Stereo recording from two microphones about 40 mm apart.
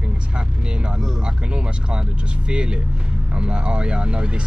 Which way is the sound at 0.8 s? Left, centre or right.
Centre.